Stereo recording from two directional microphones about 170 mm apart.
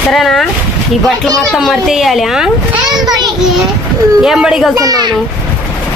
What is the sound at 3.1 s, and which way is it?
Speech, 25° right (ahead or behind).